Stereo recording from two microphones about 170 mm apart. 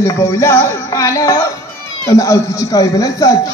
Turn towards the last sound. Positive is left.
turn(degrees=20)  # may be behind; listen again after turning